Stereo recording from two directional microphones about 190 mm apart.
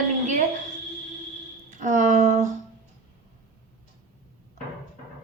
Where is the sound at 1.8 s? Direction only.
40° right (ahead or behind).